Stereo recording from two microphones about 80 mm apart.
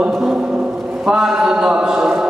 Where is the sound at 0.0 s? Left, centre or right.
Centre.